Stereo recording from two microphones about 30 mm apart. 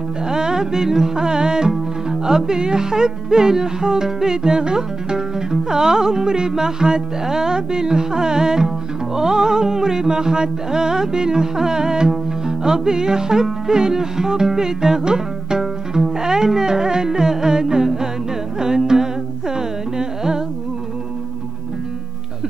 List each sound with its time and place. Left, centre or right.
0.3 s music: right